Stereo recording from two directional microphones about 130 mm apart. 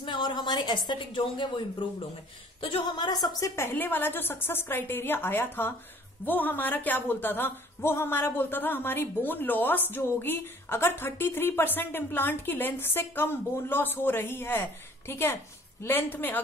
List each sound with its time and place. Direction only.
0.0 s a woman's voice: 40° left (ahead or behind); by 16.3 s 15° left (ahead or behind)